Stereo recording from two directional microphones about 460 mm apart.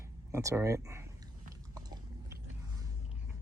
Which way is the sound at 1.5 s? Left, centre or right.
Centre.